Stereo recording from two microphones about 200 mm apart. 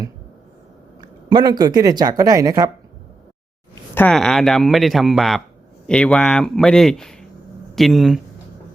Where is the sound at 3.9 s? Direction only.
5° left (ahead or behind).